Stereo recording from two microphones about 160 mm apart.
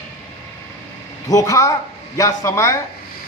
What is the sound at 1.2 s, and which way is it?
A man's voice, 20° left (ahead or behind).